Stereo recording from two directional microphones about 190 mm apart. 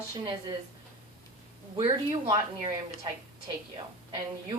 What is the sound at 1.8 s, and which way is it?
A woman's voice, 25° right (ahead or behind).